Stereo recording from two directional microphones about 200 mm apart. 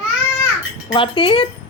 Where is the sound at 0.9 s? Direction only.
25° left (ahead or behind).